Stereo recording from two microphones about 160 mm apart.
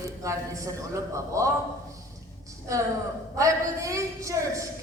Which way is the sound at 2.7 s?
20° right (ahead or behind).